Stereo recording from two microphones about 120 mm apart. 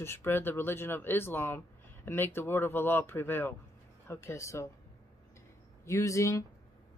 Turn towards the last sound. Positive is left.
turn(degrees=25)  # may be behind; listen again after turning